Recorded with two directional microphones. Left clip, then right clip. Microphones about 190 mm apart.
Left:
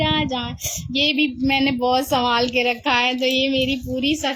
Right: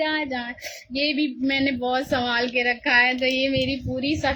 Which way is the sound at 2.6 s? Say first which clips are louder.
Even; centre (ahead or behind).